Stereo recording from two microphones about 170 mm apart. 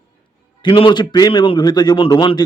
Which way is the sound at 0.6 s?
30° left (ahead or behind).